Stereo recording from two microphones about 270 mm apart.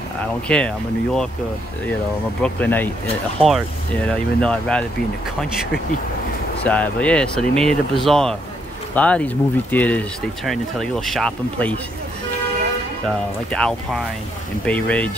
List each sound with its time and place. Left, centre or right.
0.5 s speech: centre
2.4 s speech: centre
6.6 s speech: centre
13.0 s speech: centre